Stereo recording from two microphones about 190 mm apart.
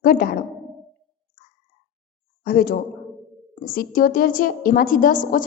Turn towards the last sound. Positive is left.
turn(degrees=45)  # may be behind; listen again after turning